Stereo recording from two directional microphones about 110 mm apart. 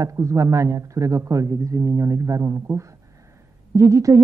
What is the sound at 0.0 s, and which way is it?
Speech, 25° right (ahead or behind).